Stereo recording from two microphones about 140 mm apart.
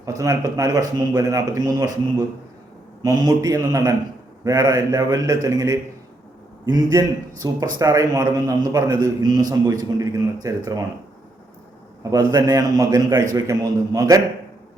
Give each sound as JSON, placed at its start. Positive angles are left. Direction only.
{"t": 0.0, "sound": "a man's voice", "side_deg": -25}
{"t": 6.8, "sound": "a man's voice", "side_deg": -25}
{"t": 12.1, "sound": "a man's voice", "side_deg": -25}